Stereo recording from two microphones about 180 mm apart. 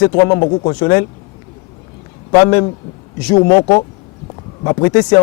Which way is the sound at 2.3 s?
20° left (ahead or behind).